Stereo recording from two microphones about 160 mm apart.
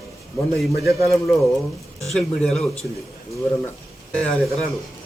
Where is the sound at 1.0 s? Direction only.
Centre (ahead or behind).